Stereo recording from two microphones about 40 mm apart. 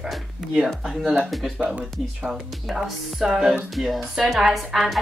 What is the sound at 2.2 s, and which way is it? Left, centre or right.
Speech, centre.